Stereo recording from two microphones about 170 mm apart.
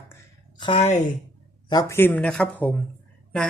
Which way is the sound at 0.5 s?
30° left (ahead or behind).